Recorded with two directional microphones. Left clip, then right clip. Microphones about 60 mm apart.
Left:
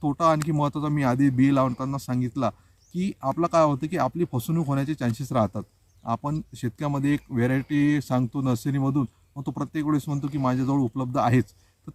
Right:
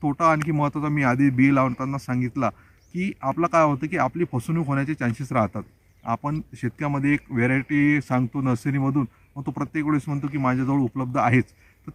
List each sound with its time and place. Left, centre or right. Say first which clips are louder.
0.1 s speech: right 2 dB; left
6.6 s speech: right 2 dB; left